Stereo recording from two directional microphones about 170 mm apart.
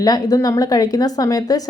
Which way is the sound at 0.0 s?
20° left (ahead or behind).